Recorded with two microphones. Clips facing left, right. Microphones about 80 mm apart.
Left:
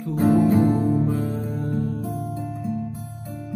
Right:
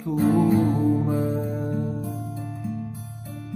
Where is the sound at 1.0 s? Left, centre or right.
Centre.